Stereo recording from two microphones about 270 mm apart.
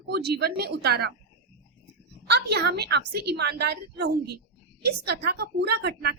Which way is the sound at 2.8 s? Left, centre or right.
Right.